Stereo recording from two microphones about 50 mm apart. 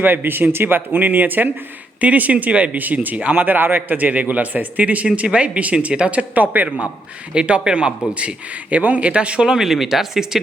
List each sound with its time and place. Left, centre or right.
0.0 s a man's voice: right
7.3 s a man's voice: right
9.6 s speech: centre